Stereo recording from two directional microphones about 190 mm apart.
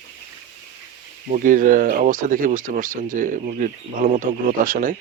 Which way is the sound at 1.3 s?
45° right (ahead or behind).